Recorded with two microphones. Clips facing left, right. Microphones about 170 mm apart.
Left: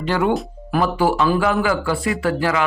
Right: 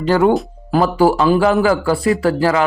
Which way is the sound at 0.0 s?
40° right (ahead or behind).